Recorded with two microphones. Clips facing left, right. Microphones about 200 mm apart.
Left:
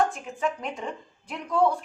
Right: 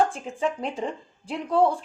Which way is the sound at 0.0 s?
30° right (ahead or behind).